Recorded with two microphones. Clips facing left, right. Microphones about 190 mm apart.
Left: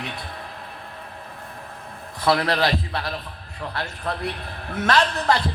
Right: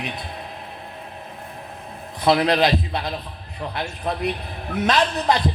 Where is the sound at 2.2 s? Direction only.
20° right (ahead or behind).